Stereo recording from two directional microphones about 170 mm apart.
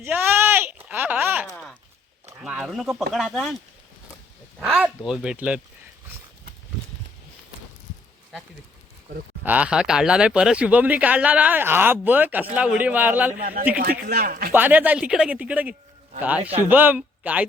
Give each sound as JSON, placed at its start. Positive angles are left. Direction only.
{"t": 0.0, "sound": "a sound", "side_deg": -10}
{"t": 2.4, "sound": "speech", "side_deg": -5}
{"t": 4.6, "sound": "speech", "side_deg": 0}
{"t": 9.4, "sound": "speech", "side_deg": -10}
{"t": 13.4, "sound": "speech", "side_deg": -55}
{"t": 14.5, "sound": "speech", "side_deg": -10}
{"t": 16.4, "sound": "speech", "side_deg": -35}
{"t": 16.6, "sound": "speech", "side_deg": -10}